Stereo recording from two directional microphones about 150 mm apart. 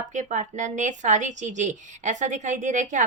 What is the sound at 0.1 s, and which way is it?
A woman's voice, 55° right (ahead or behind).